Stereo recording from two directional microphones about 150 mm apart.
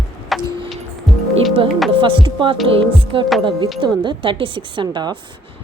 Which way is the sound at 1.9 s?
35° right (ahead or behind).